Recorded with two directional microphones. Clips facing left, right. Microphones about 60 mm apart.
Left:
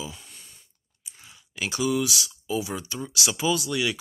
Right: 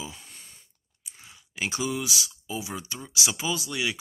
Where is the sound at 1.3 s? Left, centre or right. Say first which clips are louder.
Even; right.